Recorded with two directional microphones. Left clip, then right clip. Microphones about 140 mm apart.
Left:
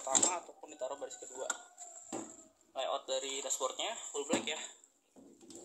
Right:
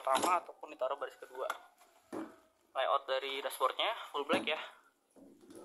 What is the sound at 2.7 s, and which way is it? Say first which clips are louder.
Speech: right 4 dB; 5° left (ahead or behind).